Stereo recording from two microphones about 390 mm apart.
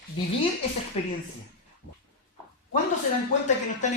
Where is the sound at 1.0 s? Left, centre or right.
Centre.